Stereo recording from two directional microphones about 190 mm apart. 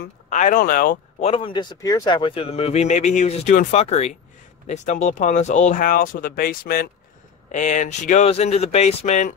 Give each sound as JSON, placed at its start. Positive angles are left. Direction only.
{"t": 0.3, "sound": "speech", "side_deg": 45}
{"t": 1.3, "sound": "speech", "side_deg": 25}
{"t": 7.5, "sound": "speech", "side_deg": 40}